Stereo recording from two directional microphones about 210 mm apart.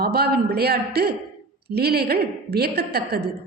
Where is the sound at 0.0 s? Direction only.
50° right (ahead or behind).